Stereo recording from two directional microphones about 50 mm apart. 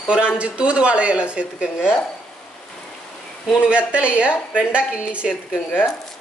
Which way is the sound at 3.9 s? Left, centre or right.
Right.